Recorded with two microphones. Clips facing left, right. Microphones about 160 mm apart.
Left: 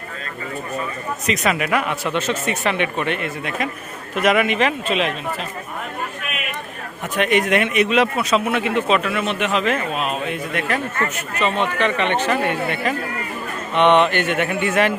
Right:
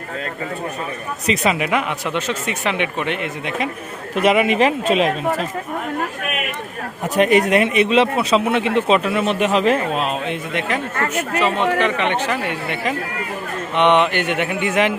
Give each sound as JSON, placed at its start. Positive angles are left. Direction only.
{"t": 1.3, "sound": "speech", "side_deg": -25}
{"t": 4.1, "sound": "a man's voice", "side_deg": -30}
{"t": 7.2, "sound": "a man's voice", "side_deg": -35}
{"t": 11.1, "sound": "speech", "side_deg": -15}
{"t": 13.7, "sound": "speech", "side_deg": -15}